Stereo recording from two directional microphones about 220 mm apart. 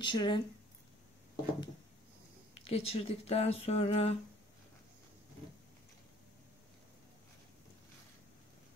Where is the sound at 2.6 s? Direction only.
25° left (ahead or behind).